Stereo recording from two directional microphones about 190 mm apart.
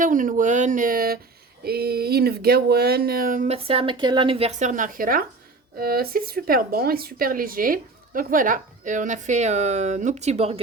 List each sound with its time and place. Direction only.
0.0 s speech: 45° right (ahead or behind)